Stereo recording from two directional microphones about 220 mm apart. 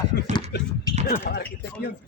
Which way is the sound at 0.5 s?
50° left (ahead or behind).